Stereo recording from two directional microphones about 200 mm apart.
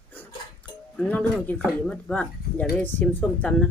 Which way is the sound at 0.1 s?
10° left (ahead or behind).